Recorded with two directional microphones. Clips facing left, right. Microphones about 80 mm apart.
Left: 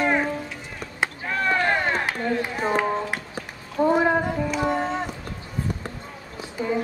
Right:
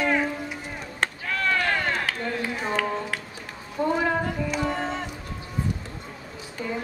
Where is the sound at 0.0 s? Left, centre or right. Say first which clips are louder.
Left 2 dB; left.